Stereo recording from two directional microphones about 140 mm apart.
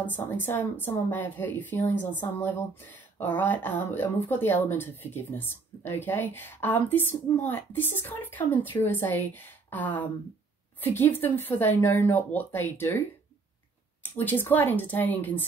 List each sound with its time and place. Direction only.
0.0 s a woman's voice: 15° left (ahead or behind)
14.1 s a woman's voice: 15° left (ahead or behind)